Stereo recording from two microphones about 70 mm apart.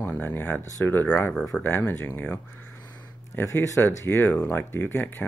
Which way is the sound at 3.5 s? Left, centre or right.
Left.